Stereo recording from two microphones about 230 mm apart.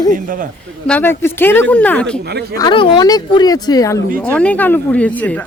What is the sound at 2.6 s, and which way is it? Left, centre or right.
Speech, centre.